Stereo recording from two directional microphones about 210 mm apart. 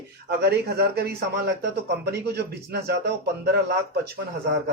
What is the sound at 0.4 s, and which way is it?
A man's voice, 50° right (ahead or behind).